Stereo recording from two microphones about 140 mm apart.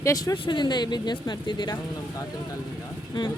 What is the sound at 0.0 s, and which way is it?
Speech, 20° left (ahead or behind).